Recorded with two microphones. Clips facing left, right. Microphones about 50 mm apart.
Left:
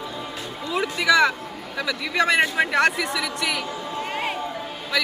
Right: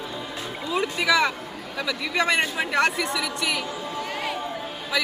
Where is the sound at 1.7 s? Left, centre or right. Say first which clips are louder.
Left 2 dB; centre.